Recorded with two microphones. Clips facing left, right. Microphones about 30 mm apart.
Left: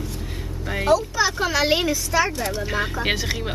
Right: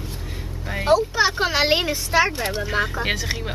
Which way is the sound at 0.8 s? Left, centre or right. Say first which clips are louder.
Right 2 dB; right.